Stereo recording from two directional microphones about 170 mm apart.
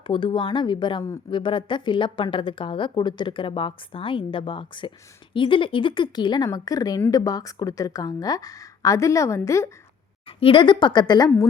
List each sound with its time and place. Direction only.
0.1 s a woman's voice: 30° left (ahead or behind)
10.2 s a woman's voice: 30° left (ahead or behind)